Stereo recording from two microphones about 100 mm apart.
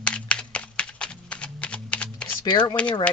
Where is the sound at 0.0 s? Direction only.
10° left (ahead or behind).